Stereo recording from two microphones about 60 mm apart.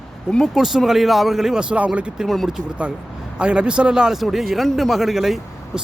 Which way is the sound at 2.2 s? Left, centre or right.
Centre.